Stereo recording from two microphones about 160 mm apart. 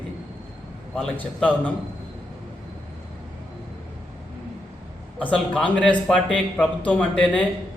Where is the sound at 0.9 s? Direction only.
10° left (ahead or behind).